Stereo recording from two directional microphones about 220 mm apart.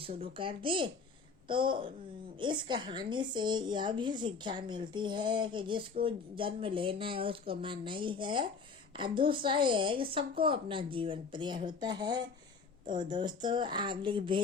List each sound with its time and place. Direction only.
0.0 s a woman's voice: 25° right (ahead or behind)